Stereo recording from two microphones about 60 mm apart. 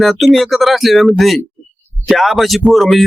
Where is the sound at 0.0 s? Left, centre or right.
Centre.